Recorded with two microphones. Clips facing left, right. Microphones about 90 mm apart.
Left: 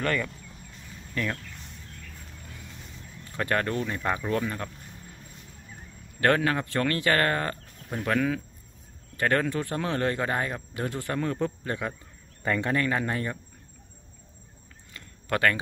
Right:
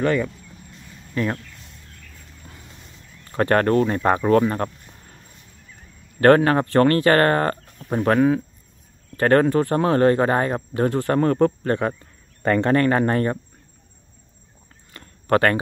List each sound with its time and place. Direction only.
0.0 s speech: 15° right (ahead or behind)
1.1 s speech: 35° right (ahead or behind)
3.3 s speech: 50° right (ahead or behind)
6.2 s speech: 45° right (ahead or behind)
9.8 s speech: 40° right (ahead or behind)
10.9 s a man's voice: 55° right (ahead or behind)
14.9 s a sound: 40° right (ahead or behind)